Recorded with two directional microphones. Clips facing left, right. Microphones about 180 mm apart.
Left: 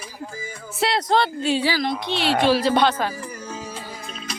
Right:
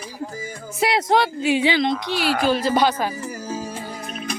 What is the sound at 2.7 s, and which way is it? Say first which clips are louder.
Speech: even; 10° right (ahead or behind).